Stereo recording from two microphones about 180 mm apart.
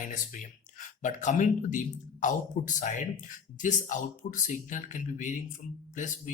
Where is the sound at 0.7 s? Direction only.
45° left (ahead or behind).